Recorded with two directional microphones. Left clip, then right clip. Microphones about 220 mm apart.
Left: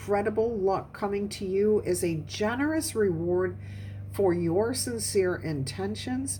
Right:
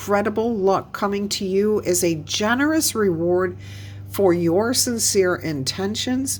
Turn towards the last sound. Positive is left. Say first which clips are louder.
# right 9 dB
turn(degrees=-30)  # may be behind; listen again after turning